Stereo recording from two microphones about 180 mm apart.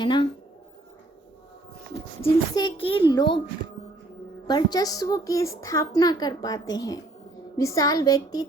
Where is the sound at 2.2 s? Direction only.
25° left (ahead or behind).